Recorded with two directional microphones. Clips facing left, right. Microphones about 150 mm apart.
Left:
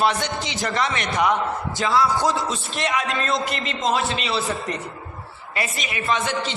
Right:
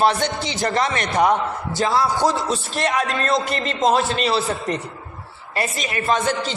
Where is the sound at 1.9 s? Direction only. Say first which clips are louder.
Left 1 dB; 25° right (ahead or behind).